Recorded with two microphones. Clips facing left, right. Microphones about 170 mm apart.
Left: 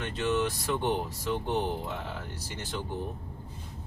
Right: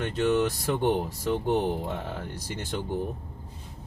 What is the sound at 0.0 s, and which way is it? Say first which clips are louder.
Speech: right 4 dB; 45° right (ahead or behind).